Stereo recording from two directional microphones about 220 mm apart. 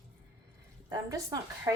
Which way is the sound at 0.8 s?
15° right (ahead or behind).